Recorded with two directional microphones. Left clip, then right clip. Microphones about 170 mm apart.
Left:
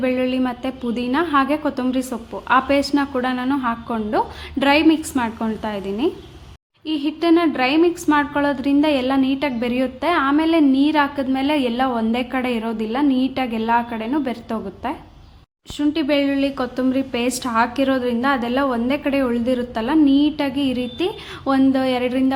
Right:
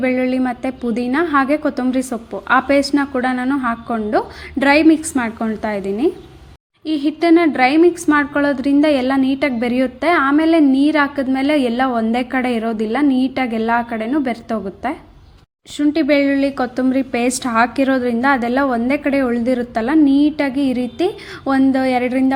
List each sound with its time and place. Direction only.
0.0 s a woman's voice: 20° right (ahead or behind)